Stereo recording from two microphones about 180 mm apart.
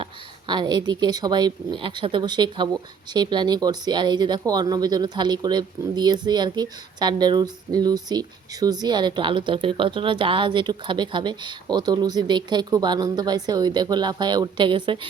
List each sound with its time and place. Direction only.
0.0 s speech: 25° right (ahead or behind)